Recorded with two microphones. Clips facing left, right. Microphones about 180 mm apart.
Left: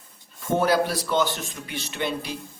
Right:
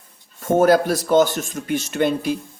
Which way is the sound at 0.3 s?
45° right (ahead or behind).